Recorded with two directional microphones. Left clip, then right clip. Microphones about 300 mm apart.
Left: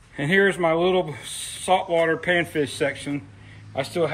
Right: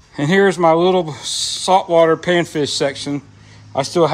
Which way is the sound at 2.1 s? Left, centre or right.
Right.